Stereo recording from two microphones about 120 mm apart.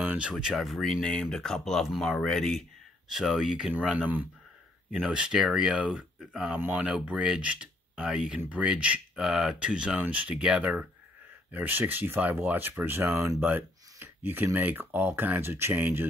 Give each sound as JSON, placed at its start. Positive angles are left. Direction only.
{"t": 0.0, "sound": "speech", "side_deg": -10}